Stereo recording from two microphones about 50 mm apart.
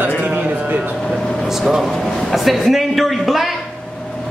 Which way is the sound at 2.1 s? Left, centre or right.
Centre.